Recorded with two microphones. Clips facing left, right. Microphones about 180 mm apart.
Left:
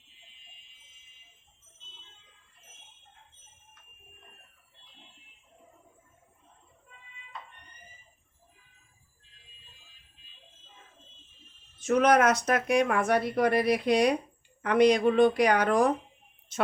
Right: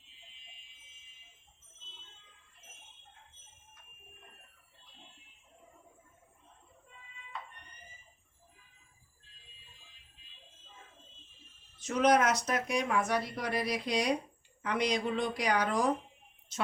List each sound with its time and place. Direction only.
11.8 s speech: 55° left (ahead or behind)